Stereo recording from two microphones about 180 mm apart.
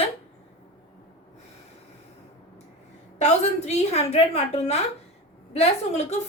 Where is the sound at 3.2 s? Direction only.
40° left (ahead or behind).